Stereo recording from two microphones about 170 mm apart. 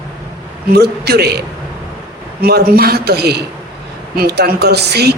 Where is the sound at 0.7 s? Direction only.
70° right (ahead or behind).